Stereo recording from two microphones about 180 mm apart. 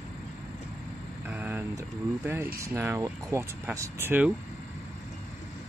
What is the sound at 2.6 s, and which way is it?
Speech, 15° right (ahead or behind).